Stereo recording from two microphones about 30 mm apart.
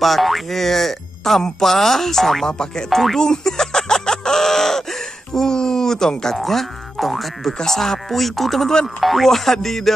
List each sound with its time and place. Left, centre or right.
0.0 s speech: centre
2.4 s speech: centre
2.9 s speech: centre
3.2 s a sound: centre
6.3 s speech: centre